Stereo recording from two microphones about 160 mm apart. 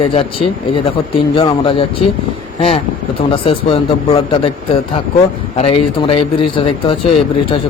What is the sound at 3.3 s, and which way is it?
A man's voice, 35° left (ahead or behind).